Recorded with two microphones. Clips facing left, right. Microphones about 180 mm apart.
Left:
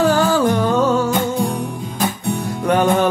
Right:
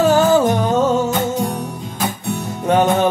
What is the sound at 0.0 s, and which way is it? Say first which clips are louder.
Music: right 2 dB; 20° right (ahead or behind).